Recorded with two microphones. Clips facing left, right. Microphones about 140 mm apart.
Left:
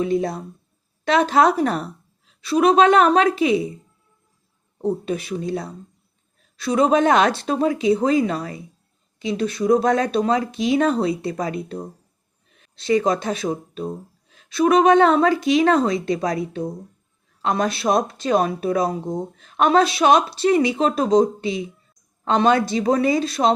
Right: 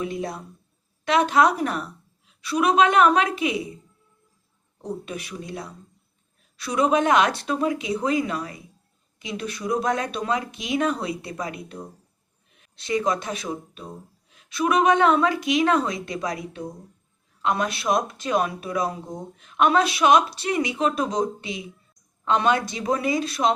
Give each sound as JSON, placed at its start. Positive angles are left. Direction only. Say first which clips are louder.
{"t": 0.0, "sound": "speech", "louder": "left 7 dB", "side_deg": 30}
{"t": 4.8, "sound": "speech", "louder": "left 9 dB", "side_deg": 30}